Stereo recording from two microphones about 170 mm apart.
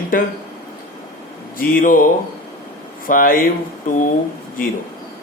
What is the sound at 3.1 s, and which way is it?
Speech, 55° left (ahead or behind).